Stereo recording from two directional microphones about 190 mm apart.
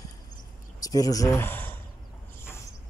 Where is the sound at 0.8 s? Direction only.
20° left (ahead or behind).